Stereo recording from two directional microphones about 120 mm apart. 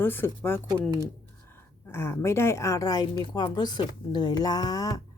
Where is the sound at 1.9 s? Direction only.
20° left (ahead or behind).